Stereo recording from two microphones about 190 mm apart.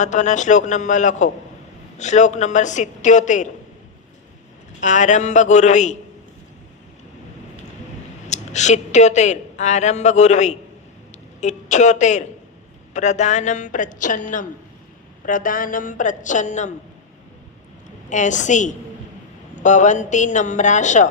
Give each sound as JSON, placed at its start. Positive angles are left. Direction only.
{"t": 0.0, "sound": "a woman's voice", "side_deg": 40}
{"t": 4.8, "sound": "a woman's voice", "side_deg": 40}
{"t": 8.3, "sound": "a woman's voice", "side_deg": 40}
{"t": 18.1, "sound": "a woman's voice", "side_deg": 40}